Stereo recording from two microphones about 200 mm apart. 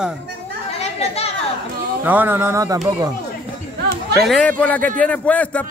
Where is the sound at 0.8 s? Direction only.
30° left (ahead or behind).